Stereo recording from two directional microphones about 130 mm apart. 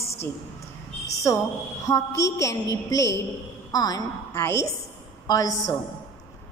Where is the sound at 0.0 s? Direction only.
20° left (ahead or behind).